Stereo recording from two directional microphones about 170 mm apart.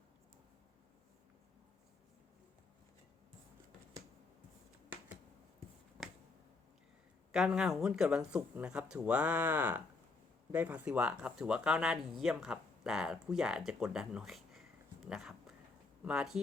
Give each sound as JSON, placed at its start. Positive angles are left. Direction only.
{"t": 7.3, "sound": "speech", "side_deg": -5}
{"t": 15.0, "sound": "a sound", "side_deg": 0}
{"t": 16.0, "sound": "speech", "side_deg": -5}